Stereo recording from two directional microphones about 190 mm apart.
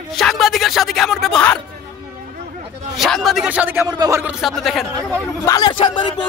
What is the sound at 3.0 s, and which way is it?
Speech, centre (ahead or behind).